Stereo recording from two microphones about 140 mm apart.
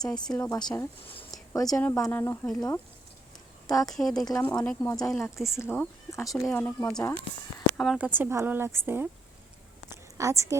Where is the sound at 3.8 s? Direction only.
Centre (ahead or behind).